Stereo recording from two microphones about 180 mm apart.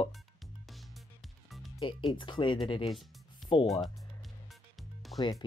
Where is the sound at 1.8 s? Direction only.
30° left (ahead or behind).